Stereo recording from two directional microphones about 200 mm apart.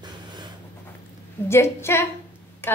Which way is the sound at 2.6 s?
10° left (ahead or behind).